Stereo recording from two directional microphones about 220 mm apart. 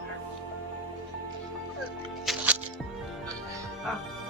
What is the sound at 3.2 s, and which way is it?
Music, 15° right (ahead or behind).